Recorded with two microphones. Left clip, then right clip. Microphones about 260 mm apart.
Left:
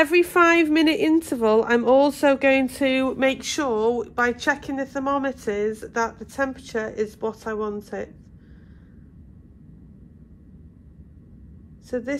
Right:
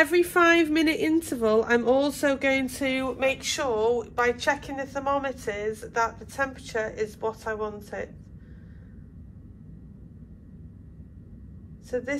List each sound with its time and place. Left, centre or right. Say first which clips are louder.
0.0 s a woman's voice: left 3 dB; left
11.9 s a woman's voice: left 2 dB; left